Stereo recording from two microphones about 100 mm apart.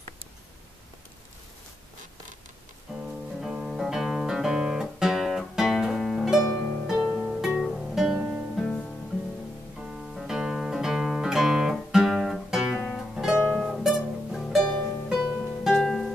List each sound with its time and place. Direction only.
3.3 s guitar: 5° right (ahead or behind)
7.2 s music: 5° right (ahead or behind)
8.2 s music: 15° right (ahead or behind)
8.5 s music: 5° left (ahead or behind)
9.8 s music: 5° right (ahead or behind)
15.0 s music: 5° right (ahead or behind)